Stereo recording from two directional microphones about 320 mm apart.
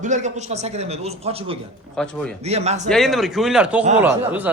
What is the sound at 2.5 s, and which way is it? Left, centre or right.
Speech, centre.